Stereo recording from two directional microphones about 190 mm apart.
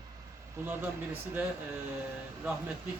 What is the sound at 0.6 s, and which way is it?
Speech, 10° right (ahead or behind).